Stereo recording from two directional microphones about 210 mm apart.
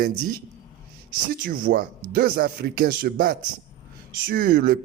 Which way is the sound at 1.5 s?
45° right (ahead or behind).